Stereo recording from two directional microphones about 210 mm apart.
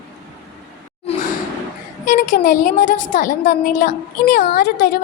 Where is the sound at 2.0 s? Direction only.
40° left (ahead or behind).